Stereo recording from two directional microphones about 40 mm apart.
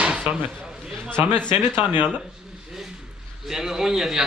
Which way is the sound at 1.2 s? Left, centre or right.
Right.